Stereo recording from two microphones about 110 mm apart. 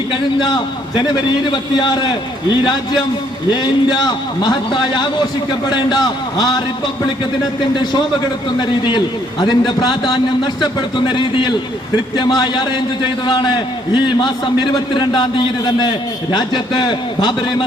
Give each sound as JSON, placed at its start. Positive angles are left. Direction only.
{"t": 0.3, "sound": "a man's voice", "side_deg": 40}